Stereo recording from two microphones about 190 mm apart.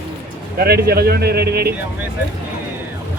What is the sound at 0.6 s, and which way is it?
Speech, 55° right (ahead or behind).